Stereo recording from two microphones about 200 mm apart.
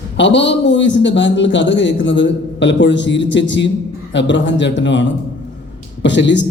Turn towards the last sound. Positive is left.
turn(degrees=65)  # may be behind; listen again after turning